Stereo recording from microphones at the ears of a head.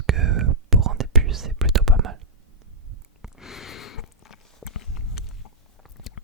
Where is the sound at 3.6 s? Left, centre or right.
Left.